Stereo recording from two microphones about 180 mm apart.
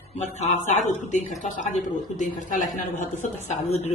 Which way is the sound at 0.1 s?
40° left (ahead or behind).